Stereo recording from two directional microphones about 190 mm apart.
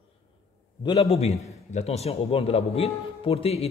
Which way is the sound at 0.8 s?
30° left (ahead or behind).